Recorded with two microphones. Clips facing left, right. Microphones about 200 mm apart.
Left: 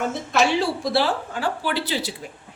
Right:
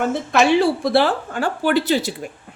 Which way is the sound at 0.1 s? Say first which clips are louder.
Right 5 dB; 55° right (ahead or behind).